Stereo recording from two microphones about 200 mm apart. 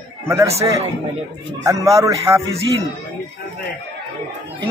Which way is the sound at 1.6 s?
15° right (ahead or behind).